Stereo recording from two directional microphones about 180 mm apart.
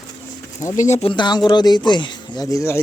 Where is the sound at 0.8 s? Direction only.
40° left (ahead or behind); by 2.8 s 15° left (ahead or behind).